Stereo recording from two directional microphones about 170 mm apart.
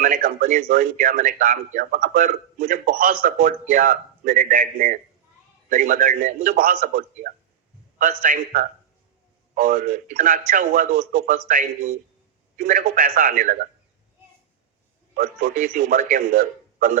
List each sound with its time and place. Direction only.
0.0 s speech: 55° right (ahead or behind)
15.1 s speech: 55° right (ahead or behind)